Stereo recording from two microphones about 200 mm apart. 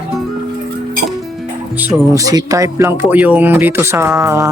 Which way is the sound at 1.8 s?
15° right (ahead or behind).